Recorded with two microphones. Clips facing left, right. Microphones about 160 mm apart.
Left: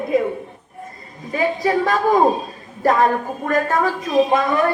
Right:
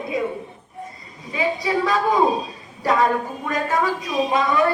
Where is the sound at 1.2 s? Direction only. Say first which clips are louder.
Left 4 dB; 50° left (ahead or behind).